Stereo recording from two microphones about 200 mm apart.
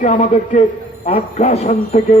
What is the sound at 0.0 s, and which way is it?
A man's voice, 40° left (ahead or behind).